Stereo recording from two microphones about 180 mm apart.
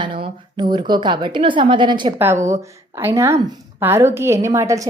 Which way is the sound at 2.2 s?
15° right (ahead or behind).